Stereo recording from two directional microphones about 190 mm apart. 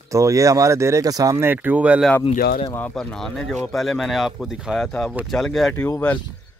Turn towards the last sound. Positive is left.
turn(degrees=10)  # may be behind; listen again after turning